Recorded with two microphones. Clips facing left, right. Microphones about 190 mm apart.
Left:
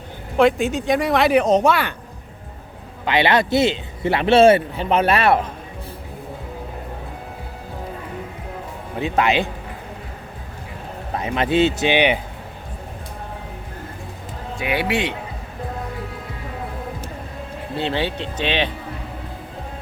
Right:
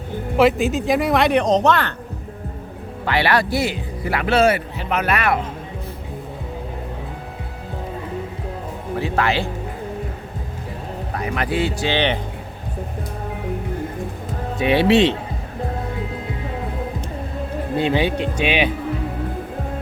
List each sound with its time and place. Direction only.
0.3 s speech: centre (ahead or behind)
3.1 s a man's voice: 20° left (ahead or behind)
9.0 s a man's voice: 20° left (ahead or behind)
11.1 s a man's voice: 25° left (ahead or behind)
14.6 s speech: 25° right (ahead or behind)
17.7 s speech: 15° right (ahead or behind)